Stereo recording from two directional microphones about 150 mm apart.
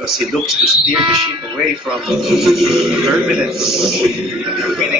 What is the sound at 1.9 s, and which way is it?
A man's voice, centre (ahead or behind).